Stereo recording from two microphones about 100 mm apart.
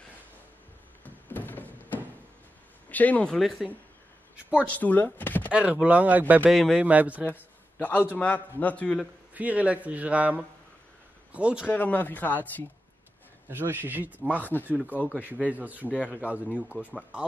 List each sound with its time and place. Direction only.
1.0 s a sound: 20° left (ahead or behind)
2.9 s speech: 15° left (ahead or behind)
3.3 s a man's voice: centre (ahead or behind)
4.6 s speech: 15° left (ahead or behind)
5.5 s speech: 15° right (ahead or behind)
6.5 s a man's voice: centre (ahead or behind)
6.8 s speech: 15° right (ahead or behind)
7.2 s a sound: 15° left (ahead or behind)
8.2 s speech: 15° left (ahead or behind)
9.3 s speech: 15° right (ahead or behind)
11.3 s speech: 10° right (ahead or behind)
11.6 s speech: 15° left (ahead or behind)
13.5 s speech: 20° right (ahead or behind)